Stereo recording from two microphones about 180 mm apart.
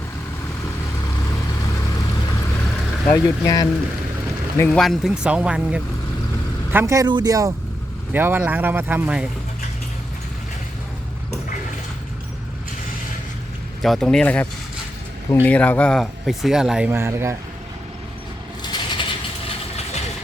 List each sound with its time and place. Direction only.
3.1 s a man's voice: 20° left (ahead or behind)
4.8 s speech: centre (ahead or behind)
6.7 s speech: 15° right (ahead or behind)
13.8 s speech: centre (ahead or behind)
15.4 s speech: 10° left (ahead or behind); by 17.3 s 15° right (ahead or behind)
18.7 s a sound: 25° left (ahead or behind)